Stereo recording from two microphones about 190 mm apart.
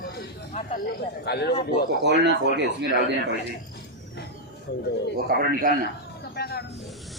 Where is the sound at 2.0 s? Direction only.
65° right (ahead or behind).